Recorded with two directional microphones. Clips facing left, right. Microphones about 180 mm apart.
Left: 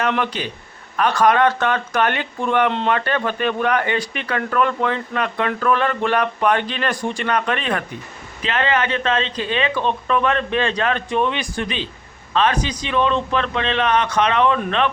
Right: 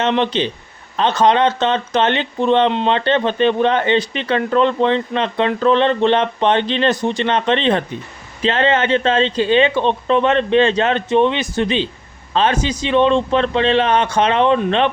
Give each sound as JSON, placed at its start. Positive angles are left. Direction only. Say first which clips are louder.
{"t": 0.0, "sound": "speech", "louder": "right 5 dB", "side_deg": -25}